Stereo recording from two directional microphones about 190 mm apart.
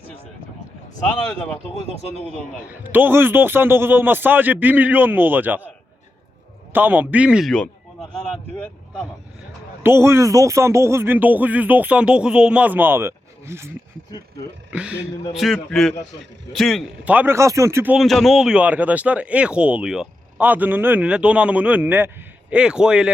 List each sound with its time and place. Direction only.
1.3 s a man's voice: 5° left (ahead or behind)
2.8 s speech: 10° right (ahead or behind)
6.7 s speech: 10° right (ahead or behind)
8.1 s a sound: 5° left (ahead or behind)
9.8 s speech: 15° right (ahead or behind)
14.7 s a man's voice: 5° right (ahead or behind)
17.9 s speech: centre (ahead or behind)